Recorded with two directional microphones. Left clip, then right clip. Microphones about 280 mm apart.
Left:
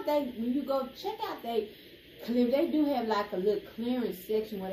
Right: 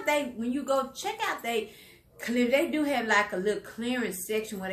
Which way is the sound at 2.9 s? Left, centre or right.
Right.